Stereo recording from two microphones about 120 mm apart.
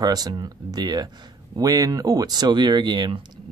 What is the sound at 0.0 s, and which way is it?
Speech, 35° right (ahead or behind).